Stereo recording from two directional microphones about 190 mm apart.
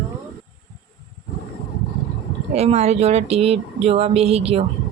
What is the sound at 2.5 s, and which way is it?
Speech, 35° right (ahead or behind).